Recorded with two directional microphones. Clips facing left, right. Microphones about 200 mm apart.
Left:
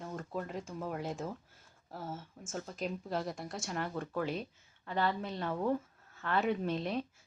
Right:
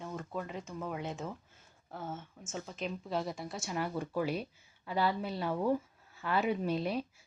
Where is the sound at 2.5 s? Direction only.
5° right (ahead or behind).